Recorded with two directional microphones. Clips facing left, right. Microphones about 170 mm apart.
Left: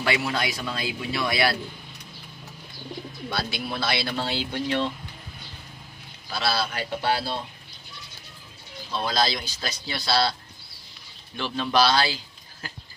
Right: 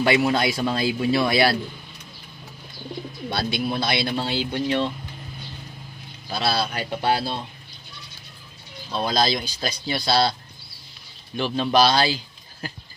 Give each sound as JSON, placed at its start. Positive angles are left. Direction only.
{"t": 0.0, "sound": "speech", "side_deg": -25}
{"t": 3.3, "sound": "speech", "side_deg": -25}
{"t": 6.3, "sound": "speech", "side_deg": -20}
{"t": 8.9, "sound": "speech", "side_deg": -15}
{"t": 11.3, "sound": "speech", "side_deg": -15}